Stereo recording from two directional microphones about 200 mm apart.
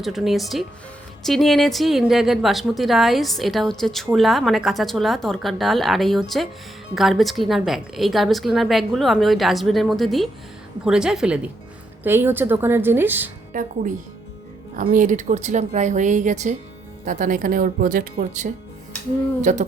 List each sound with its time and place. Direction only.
0.0 s a woman's voice: centre (ahead or behind)
13.5 s a woman's voice: 40° right (ahead or behind)